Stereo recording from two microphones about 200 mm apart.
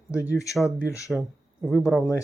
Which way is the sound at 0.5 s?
Centre (ahead or behind).